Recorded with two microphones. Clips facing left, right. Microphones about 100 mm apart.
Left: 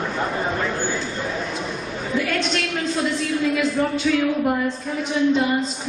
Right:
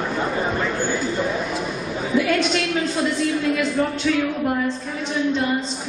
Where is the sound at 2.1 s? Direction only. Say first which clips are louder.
Right 4 dB; 5° right (ahead or behind).